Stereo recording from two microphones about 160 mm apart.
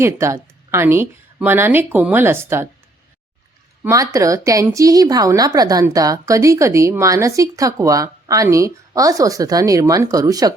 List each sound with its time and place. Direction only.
0.0 s a woman's voice: 15° right (ahead or behind)
3.8 s a woman's voice: 20° right (ahead or behind)